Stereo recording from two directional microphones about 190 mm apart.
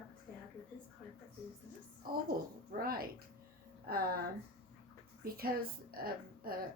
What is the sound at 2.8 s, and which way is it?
Speech, 50° right (ahead or behind).